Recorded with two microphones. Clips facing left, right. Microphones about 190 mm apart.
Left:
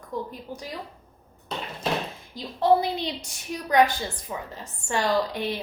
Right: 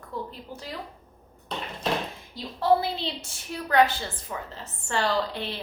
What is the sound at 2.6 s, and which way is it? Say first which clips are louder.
A woman's voice: left 2 dB; 15° left (ahead or behind).